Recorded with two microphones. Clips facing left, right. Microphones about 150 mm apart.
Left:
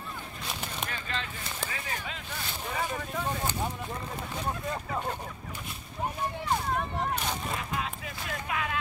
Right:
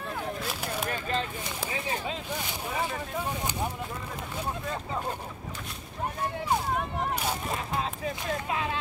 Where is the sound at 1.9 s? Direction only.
30° right (ahead or behind).